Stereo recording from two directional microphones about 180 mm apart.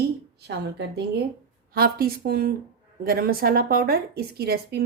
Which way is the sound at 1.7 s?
55° right (ahead or behind).